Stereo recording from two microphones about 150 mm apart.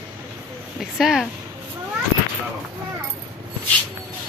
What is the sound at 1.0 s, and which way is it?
Speech, 5° right (ahead or behind).